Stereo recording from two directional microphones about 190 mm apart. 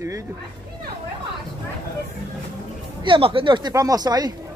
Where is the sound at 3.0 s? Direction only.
25° right (ahead or behind).